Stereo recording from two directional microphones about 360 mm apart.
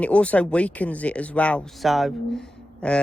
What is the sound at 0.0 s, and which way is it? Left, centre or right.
Speech, centre.